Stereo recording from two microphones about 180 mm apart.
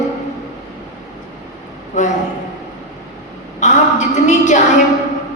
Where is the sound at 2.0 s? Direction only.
45° left (ahead or behind).